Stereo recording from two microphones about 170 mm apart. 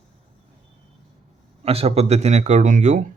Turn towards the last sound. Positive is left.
turn(degrees=-50)  # may be behind; listen again after turning